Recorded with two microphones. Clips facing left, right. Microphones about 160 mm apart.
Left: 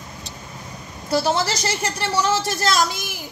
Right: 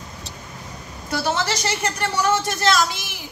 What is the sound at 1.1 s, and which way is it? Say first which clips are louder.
Speech: left 3 dB; 35° left (ahead or behind).